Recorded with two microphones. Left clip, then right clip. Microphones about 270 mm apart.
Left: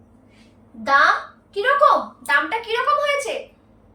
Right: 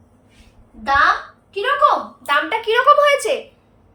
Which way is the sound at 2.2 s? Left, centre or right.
Centre.